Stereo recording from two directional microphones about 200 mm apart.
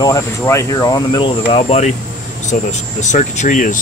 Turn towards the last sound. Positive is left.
turn(degrees=40)  # may be behind; listen again after turning